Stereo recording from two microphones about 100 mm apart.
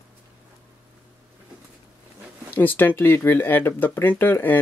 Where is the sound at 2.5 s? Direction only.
20° left (ahead or behind).